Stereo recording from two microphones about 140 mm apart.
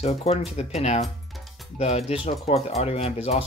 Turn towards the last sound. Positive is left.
turn(degrees=45)  # may be behind; listen again after turning